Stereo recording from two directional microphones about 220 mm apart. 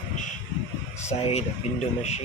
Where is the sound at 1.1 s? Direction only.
25° left (ahead or behind).